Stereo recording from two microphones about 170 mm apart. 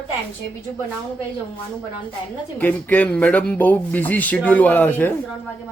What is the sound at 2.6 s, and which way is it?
Speech, 10° left (ahead or behind).